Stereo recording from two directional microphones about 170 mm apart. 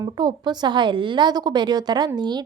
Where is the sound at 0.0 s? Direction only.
25° right (ahead or behind).